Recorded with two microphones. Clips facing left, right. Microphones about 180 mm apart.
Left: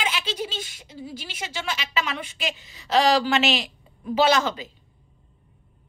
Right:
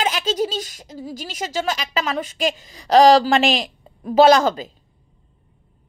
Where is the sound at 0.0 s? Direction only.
45° right (ahead or behind).